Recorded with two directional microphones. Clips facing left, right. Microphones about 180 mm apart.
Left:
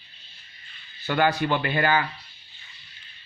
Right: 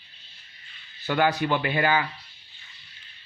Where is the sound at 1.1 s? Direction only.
10° right (ahead or behind).